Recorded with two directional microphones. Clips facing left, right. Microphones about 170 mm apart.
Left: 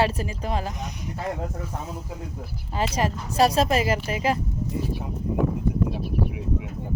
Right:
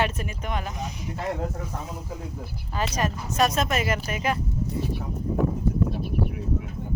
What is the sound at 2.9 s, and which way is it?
A woman's voice, 30° left (ahead or behind).